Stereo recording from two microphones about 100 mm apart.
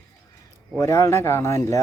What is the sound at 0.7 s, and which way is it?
Speech, 30° left (ahead or behind).